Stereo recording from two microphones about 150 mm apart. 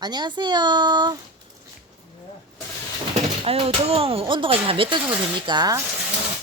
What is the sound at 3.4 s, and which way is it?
Speech, 40° right (ahead or behind).